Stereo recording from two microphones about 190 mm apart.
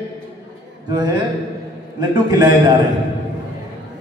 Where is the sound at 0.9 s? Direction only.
25° right (ahead or behind).